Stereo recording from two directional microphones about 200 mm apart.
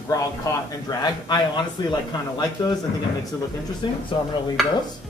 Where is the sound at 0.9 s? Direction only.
20° left (ahead or behind).